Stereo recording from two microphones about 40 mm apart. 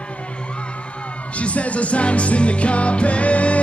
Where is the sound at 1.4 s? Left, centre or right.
Left.